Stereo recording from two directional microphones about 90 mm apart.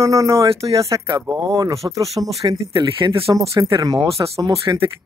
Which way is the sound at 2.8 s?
70° right (ahead or behind).